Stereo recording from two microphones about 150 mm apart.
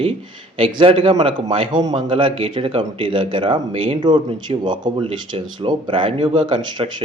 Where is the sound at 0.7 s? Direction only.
35° right (ahead or behind).